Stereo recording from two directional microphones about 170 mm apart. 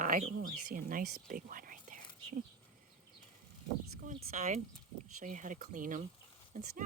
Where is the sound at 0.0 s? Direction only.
50° right (ahead or behind).